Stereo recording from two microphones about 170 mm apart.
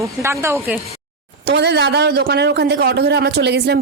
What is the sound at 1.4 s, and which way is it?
A man's voice, 80° right.